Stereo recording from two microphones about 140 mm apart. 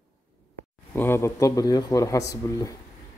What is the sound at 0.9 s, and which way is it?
Speech, 15° left (ahead or behind).